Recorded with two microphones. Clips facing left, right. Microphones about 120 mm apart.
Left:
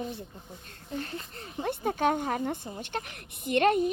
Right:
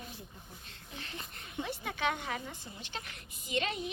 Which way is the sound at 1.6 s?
45° left (ahead or behind).